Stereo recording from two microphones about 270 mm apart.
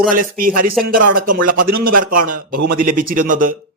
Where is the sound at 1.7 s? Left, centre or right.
Right.